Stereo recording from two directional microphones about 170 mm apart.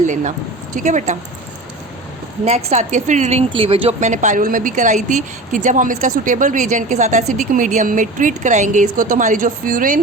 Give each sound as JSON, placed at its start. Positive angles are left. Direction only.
{"t": 0.0, "sound": "a woman's voice", "side_deg": -45}
{"t": 2.6, "sound": "a woman's voice", "side_deg": -45}